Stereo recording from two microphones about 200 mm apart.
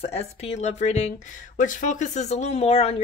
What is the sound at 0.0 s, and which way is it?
Speech, 30° left (ahead or behind).